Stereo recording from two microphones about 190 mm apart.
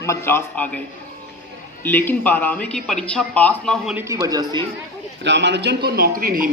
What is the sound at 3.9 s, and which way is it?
Speech, 15° right (ahead or behind).